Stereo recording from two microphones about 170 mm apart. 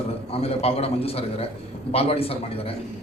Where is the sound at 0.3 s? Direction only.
35° left (ahead or behind).